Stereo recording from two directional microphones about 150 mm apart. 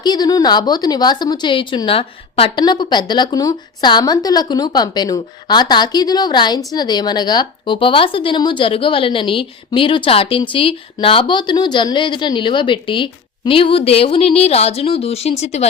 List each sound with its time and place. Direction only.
0.0 s a woman's voice: 25° left (ahead or behind); by 15.6 s 45° left (ahead or behind)